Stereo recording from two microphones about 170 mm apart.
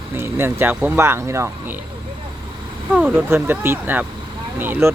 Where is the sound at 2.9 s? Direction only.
5° right (ahead or behind).